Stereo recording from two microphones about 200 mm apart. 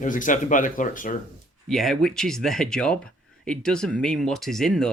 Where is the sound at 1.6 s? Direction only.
Centre (ahead or behind).